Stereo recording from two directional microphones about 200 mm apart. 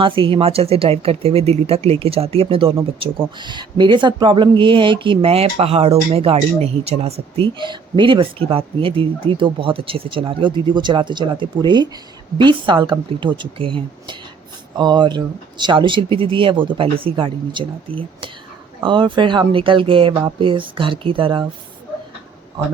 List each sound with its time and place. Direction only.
0.0 s a woman's voice: 25° right (ahead or behind)